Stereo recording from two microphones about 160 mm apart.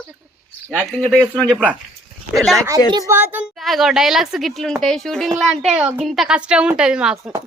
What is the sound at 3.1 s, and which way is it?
Speech, 10° right (ahead or behind).